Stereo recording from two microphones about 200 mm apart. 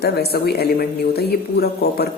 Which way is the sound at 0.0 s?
55° left (ahead or behind).